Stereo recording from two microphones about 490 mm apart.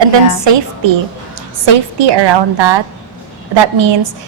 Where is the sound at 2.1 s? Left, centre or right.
Right.